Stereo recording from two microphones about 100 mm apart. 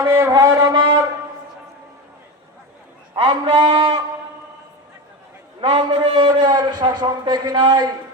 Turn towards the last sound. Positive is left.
turn(degrees=-50)  # may be behind; listen again after turning